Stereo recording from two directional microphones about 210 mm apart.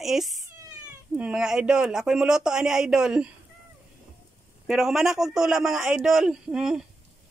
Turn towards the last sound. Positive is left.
turn(degrees=-5)  # may be behind; listen again after turning